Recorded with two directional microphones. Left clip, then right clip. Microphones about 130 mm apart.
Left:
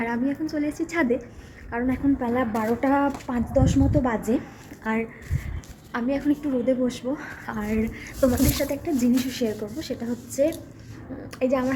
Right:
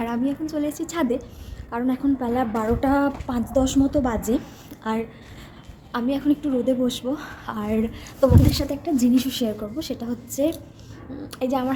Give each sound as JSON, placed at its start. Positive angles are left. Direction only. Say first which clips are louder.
{"t": 0.0, "sound": "a woman's voice", "louder": "right 1 dB", "side_deg": -25}
{"t": 8.2, "sound": "a woman's voice", "louder": "right 2 dB", "side_deg": -25}